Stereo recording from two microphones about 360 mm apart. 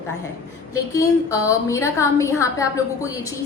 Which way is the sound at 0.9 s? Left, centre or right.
Centre.